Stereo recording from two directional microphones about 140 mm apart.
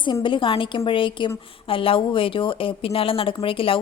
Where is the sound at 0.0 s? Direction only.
35° left (ahead or behind).